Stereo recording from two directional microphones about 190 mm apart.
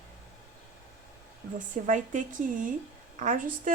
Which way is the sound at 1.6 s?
40° right (ahead or behind).